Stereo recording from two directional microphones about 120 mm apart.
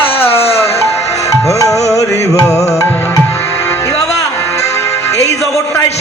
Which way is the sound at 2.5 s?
25° left (ahead or behind).